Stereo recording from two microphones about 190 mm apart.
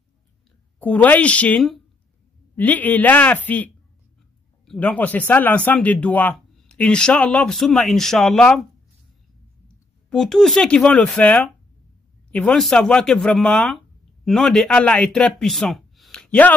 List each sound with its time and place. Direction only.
0.7 s a man's voice: 10° left (ahead or behind)
10.0 s speech: 5° left (ahead or behind)